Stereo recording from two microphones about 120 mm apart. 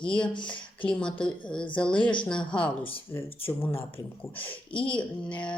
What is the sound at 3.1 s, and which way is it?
Speech, 20° left (ahead or behind).